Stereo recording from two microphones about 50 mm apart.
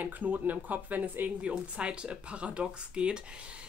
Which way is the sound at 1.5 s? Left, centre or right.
Right.